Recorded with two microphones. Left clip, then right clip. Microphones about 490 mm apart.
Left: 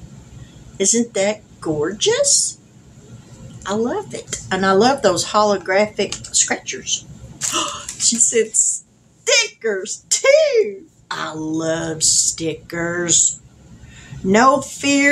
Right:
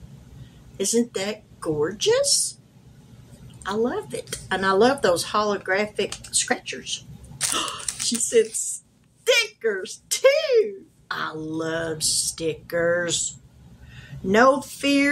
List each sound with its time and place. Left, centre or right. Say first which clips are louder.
0.7 s a child's voice: left 6 dB; right
3.6 s a child's voice: left 4 dB; right
7.5 s a sound: left 6 dB; right
9.2 s a child's voice: left 3 dB; right
14.3 s a child's voice: left 4 dB; right